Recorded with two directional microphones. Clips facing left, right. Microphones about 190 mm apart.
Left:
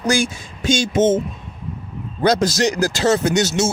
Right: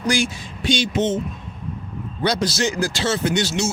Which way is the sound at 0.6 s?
45° left (ahead or behind).